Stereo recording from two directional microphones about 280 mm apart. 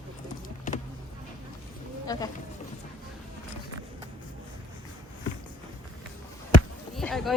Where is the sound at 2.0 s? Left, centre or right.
Centre.